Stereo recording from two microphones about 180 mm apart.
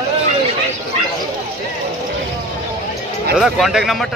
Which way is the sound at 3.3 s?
Centre (ahead or behind).